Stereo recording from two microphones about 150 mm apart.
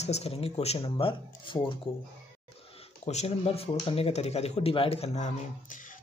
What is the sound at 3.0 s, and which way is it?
Speech, 45° left (ahead or behind).